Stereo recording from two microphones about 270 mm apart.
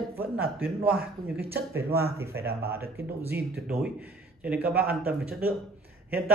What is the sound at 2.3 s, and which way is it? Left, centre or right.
Speech, right.